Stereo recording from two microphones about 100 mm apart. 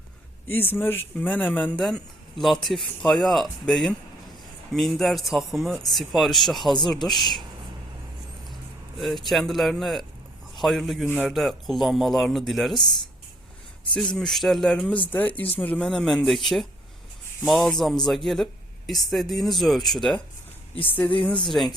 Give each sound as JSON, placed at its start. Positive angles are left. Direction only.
{"t": 0.4, "sound": "speech", "side_deg": 20}
{"t": 2.4, "sound": "speech", "side_deg": 0}
{"t": 9.0, "sound": "a man's voice", "side_deg": 0}
{"t": 13.9, "sound": "speech", "side_deg": 5}
{"t": 21.2, "sound": "speech", "side_deg": 10}